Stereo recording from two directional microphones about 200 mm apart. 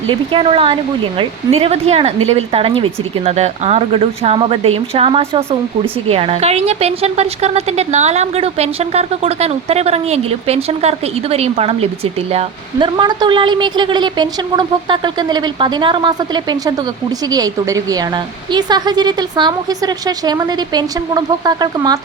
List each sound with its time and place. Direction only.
0.1 s speech: 25° right (ahead or behind)